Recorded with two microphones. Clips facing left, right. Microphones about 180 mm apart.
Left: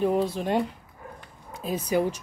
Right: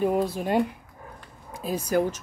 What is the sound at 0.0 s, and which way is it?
Speech, 5° right (ahead or behind).